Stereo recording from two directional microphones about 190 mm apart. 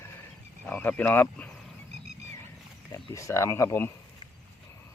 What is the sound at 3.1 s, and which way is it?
Speech, 15° left (ahead or behind).